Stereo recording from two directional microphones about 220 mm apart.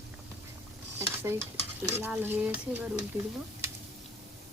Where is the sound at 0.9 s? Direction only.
10° right (ahead or behind).